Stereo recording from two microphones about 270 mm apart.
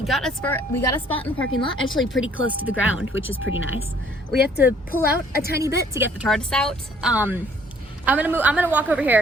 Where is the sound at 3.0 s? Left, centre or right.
Left.